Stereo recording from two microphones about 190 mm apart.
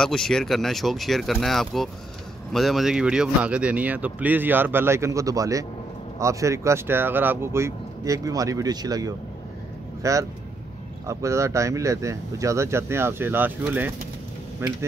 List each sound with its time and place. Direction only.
0.0 s speech: 5° left (ahead or behind); by 14.8 s 15° right (ahead or behind)